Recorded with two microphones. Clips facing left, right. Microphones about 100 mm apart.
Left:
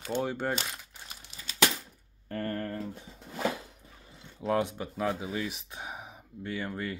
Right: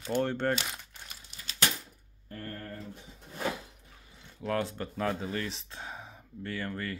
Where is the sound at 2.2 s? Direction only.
75° left (ahead or behind).